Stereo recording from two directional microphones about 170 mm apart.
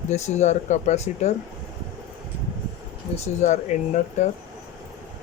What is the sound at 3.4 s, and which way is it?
Speech, 45° left (ahead or behind).